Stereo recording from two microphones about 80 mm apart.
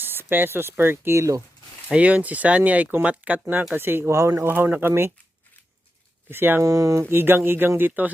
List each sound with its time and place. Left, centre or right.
0.0 s speech: right
1.9 s speech: centre; by 4.4 s right
4.4 s speech: right
6.3 s speech: right
6.6 s speech: right
7.0 s speech: right